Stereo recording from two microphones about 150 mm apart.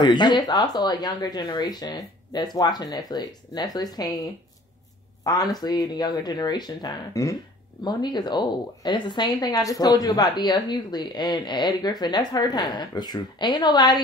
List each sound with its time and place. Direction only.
0.0 s a woman's voice: 30° left (ahead or behind)